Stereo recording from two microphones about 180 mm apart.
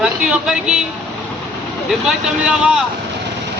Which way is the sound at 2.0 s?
5° right (ahead or behind).